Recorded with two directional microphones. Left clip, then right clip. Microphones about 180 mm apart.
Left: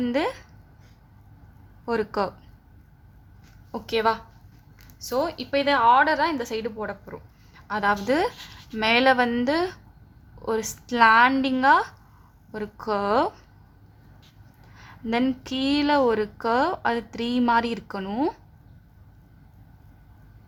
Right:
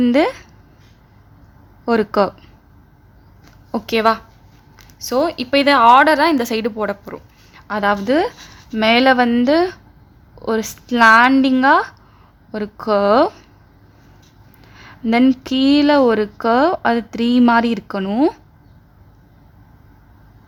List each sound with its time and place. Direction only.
0.0 s speech: 30° right (ahead or behind)
1.8 s speech: 30° right (ahead or behind)
3.7 s a woman's voice: 30° right (ahead or behind)
14.7 s speech: 25° right (ahead or behind)